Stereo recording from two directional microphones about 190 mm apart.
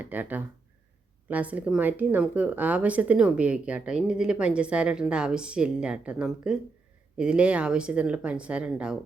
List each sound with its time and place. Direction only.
0.0 s speech: 10° right (ahead or behind)